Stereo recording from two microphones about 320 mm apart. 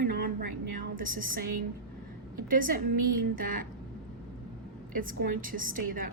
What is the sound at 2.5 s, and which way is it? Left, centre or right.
A woman's voice, right.